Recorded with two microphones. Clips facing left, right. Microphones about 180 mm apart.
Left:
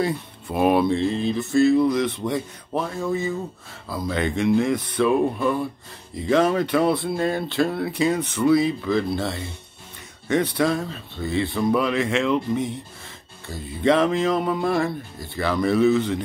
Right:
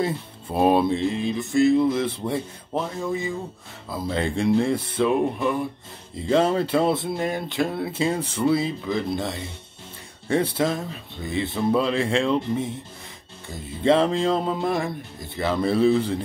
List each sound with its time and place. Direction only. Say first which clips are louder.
0.0 s music: left 1 dB; 25° right (ahead or behind)
10.2 s music: left 1 dB; 30° right (ahead or behind)